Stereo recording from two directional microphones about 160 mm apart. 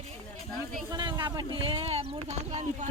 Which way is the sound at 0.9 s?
25° right (ahead or behind).